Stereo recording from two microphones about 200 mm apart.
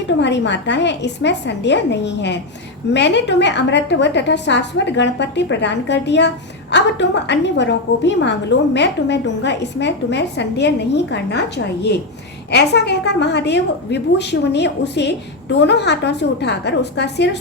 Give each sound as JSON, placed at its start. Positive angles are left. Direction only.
{"t": 0.2, "sound": "a woman's voice", "side_deg": 60}